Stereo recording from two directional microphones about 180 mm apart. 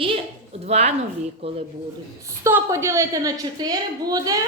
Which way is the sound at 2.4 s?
15° right (ahead or behind).